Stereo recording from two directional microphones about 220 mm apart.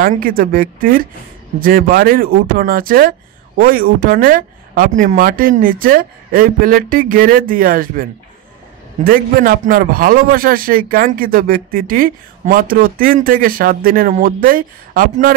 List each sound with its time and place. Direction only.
0.0 s speech: 40° right (ahead or behind)